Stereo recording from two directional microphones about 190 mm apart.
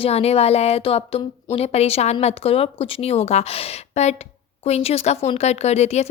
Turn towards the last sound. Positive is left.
turn(degrees=35)  # may be behind; listen again after turning